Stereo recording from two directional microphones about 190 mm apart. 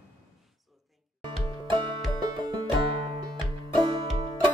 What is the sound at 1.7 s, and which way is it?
Music, 20° right (ahead or behind).